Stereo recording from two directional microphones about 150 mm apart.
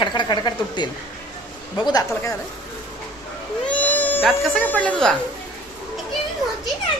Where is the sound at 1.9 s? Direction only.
25° left (ahead or behind).